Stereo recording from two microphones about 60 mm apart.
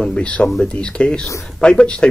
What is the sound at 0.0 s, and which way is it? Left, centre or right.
Speech, centre.